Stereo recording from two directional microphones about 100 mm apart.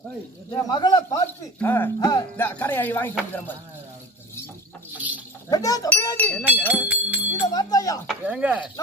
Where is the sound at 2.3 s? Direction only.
20° left (ahead or behind).